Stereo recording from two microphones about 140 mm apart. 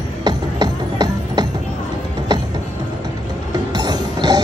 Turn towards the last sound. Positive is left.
turn(degrees=-30)  # may be behind; listen again after turning